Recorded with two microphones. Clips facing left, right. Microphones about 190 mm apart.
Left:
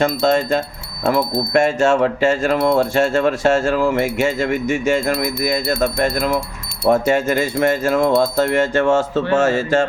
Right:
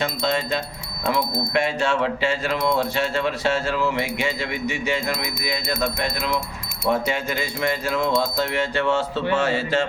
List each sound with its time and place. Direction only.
0.0 s speech: 50° left (ahead or behind)